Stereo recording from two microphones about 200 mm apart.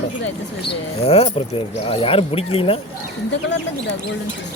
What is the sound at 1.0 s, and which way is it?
Speech, 30° left (ahead or behind).